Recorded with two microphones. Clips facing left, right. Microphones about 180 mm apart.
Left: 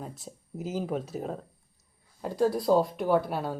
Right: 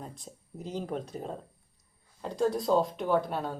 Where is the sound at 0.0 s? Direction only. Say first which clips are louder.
Left 3 dB; 5° left (ahead or behind).